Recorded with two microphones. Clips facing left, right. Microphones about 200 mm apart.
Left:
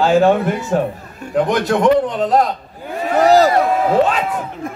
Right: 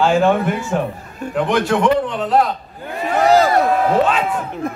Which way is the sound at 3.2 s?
40° left (ahead or behind).